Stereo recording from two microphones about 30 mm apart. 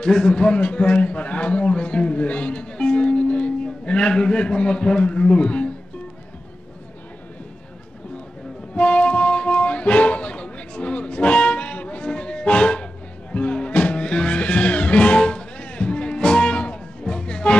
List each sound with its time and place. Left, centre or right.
0.0 s a man's voice: left
1.0 s a man's voice: left
8.7 s music: left
12.1 s music: left